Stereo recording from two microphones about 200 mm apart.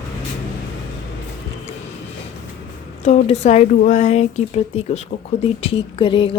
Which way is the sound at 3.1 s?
35° left (ahead or behind).